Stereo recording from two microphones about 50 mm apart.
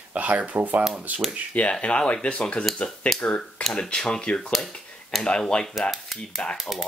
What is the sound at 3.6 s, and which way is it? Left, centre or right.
Speech, centre.